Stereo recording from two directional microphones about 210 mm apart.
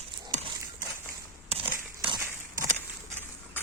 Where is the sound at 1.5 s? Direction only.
25° right (ahead or behind).